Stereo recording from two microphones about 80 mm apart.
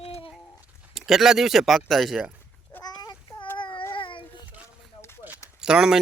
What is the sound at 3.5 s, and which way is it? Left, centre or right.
Child singing, left.